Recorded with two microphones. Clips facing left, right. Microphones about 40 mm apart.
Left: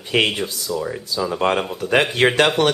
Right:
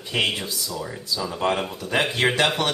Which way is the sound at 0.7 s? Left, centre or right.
Centre.